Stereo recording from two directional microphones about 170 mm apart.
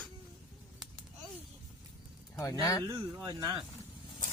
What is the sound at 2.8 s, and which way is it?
Speech, 20° right (ahead or behind).